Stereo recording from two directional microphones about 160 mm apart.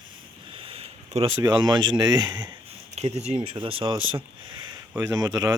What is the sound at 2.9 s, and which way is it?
Speech, 40° right (ahead or behind).